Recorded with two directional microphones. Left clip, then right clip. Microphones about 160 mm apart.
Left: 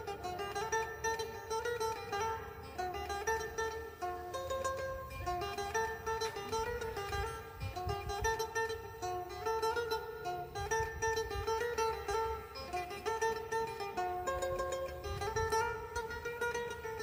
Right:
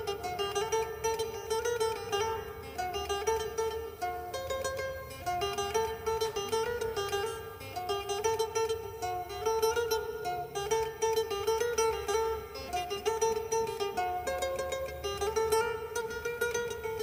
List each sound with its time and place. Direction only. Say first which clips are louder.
0.1 s music: right 6 dB; 30° right (ahead or behind)